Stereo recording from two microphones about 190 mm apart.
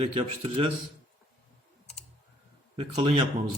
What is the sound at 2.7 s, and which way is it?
Speech, 30° right (ahead or behind).